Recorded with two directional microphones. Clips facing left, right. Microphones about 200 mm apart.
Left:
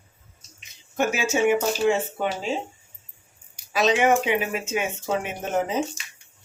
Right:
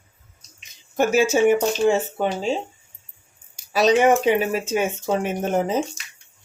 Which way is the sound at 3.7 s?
35° right (ahead or behind).